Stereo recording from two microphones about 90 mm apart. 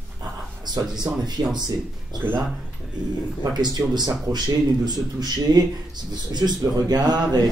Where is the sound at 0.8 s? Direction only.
10° right (ahead or behind).